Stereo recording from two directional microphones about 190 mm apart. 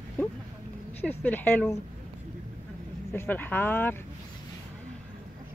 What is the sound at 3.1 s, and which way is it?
Speech, 10° left (ahead or behind).